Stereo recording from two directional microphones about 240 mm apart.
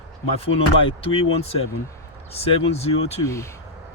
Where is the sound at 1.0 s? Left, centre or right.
Left.